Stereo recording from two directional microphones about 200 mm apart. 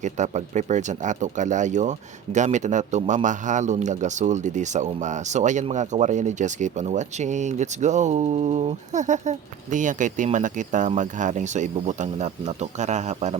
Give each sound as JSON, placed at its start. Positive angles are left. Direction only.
{"t": 0.0, "sound": "speech", "side_deg": -35}